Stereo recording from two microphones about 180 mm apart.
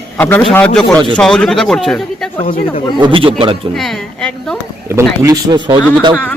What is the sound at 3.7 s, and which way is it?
Speech, centre (ahead or behind).